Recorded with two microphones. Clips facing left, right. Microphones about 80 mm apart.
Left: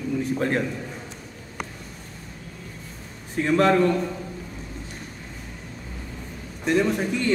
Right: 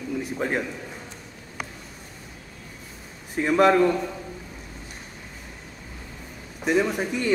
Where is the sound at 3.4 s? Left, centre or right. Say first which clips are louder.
Right 1 dB; centre.